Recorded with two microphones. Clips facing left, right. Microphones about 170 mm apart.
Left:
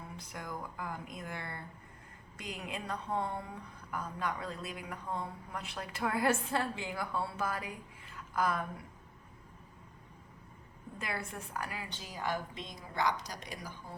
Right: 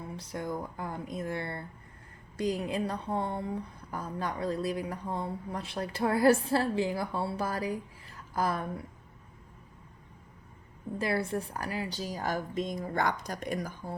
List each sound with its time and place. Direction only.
0.2 s a woman's voice: 30° right (ahead or behind)
10.9 s a woman's voice: 35° right (ahead or behind); by 13.7 s 50° right (ahead or behind)